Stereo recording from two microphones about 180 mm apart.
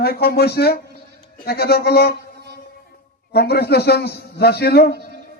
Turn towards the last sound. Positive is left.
turn(degrees=60)  # may be behind; listen again after turning